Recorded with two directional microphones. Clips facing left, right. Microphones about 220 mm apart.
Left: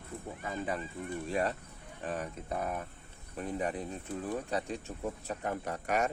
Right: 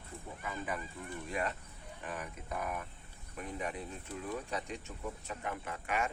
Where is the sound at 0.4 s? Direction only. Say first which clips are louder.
Left 4 dB; 30° left (ahead or behind).